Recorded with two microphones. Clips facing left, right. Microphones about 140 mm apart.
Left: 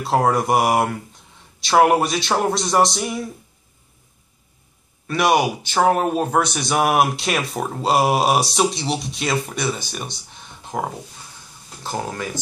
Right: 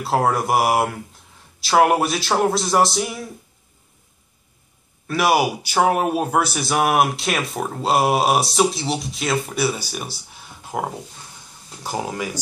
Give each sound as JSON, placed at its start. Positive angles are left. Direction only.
{"t": 0.0, "sound": "speech", "side_deg": 0}
{"t": 5.0, "sound": "speech", "side_deg": -5}